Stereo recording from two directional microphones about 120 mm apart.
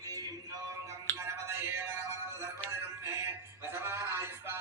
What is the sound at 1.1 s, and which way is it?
Music, 20° right (ahead or behind).